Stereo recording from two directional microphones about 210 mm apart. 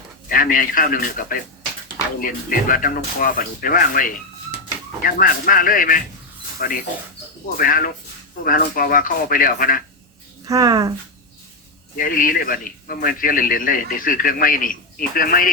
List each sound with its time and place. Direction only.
0.3 s a man's voice: 40° left (ahead or behind)
10.4 s speech: 15° right (ahead or behind)
11.9 s a man's voice: 40° left (ahead or behind)